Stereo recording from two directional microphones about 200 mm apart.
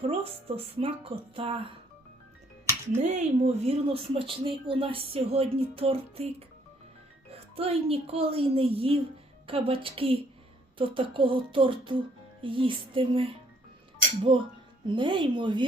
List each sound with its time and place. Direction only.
0.1 s speech: 30° right (ahead or behind)
2.9 s speech: 35° right (ahead or behind)
7.3 s speech: 30° right (ahead or behind)